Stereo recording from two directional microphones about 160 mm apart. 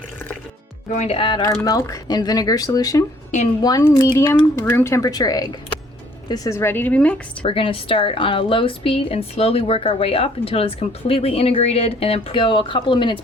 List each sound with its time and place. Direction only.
0.9 s a woman's voice: 40° left (ahead or behind)
1.5 s a woman's voice: 20° left (ahead or behind)
7.4 s a woman's voice: 35° left (ahead or behind)